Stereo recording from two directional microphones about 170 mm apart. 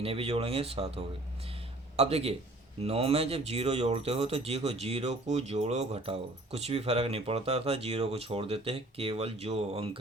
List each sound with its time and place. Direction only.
0.0 s speech: 35° right (ahead or behind)